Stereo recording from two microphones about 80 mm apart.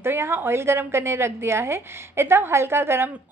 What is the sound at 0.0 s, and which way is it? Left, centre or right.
A woman's voice, right.